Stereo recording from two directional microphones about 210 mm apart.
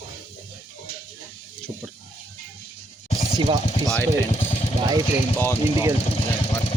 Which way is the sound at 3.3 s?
20° right (ahead or behind).